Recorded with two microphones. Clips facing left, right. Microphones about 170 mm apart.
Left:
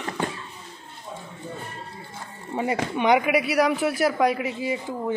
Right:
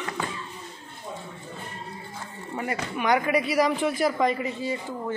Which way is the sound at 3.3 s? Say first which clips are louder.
Left 2 dB; 5° left (ahead or behind).